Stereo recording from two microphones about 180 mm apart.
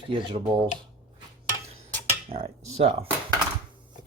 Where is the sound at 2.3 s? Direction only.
35° right (ahead or behind).